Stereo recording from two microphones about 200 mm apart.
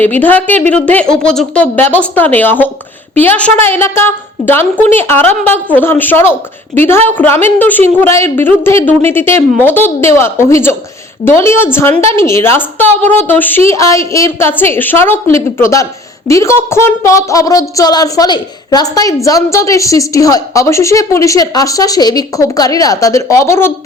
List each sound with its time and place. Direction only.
0.0 s a woman's voice: 10° left (ahead or behind)